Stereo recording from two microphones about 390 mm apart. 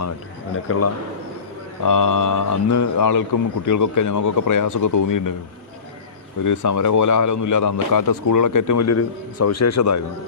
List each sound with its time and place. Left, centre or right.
0.7 s a man's voice: left
1.8 s speech: left
6.4 s speech: left